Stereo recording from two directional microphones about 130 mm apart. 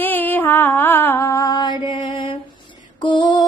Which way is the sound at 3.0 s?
40° left (ahead or behind).